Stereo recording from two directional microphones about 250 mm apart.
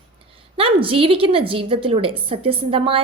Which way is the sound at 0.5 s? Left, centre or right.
Right.